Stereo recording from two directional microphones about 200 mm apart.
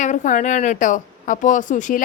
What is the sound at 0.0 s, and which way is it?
A woman's voice, 40° left (ahead or behind).